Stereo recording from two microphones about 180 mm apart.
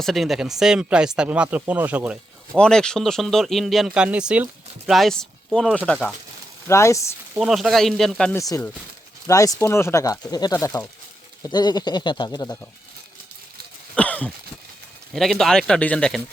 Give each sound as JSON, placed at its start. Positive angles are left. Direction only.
{"t": 0.0, "sound": "speech", "side_deg": 0}
{"t": 2.6, "sound": "speech", "side_deg": 5}
{"t": 6.7, "sound": "speech", "side_deg": 15}
{"t": 7.3, "sound": "speech", "side_deg": 0}
{"t": 8.4, "sound": "speech", "side_deg": 20}
{"t": 13.9, "sound": "a sound", "side_deg": 5}
{"t": 15.1, "sound": "speech", "side_deg": 0}